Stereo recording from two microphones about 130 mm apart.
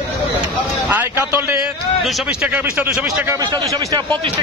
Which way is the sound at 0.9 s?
15° right (ahead or behind).